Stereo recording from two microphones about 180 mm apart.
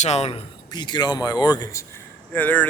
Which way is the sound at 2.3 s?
10° left (ahead or behind).